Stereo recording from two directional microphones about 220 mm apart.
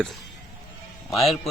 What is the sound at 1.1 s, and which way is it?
Speech, centre (ahead or behind).